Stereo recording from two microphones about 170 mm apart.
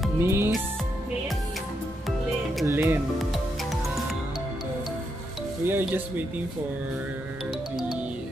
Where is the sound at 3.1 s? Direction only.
Centre (ahead or behind).